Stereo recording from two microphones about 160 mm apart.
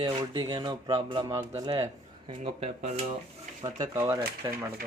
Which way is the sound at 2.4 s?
40° right (ahead or behind).